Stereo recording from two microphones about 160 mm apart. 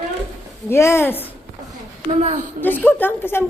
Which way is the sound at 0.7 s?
15° left (ahead or behind).